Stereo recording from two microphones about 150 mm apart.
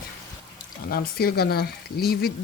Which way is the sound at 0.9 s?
90° left.